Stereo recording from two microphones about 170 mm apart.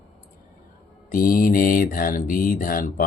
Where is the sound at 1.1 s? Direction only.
55° left (ahead or behind).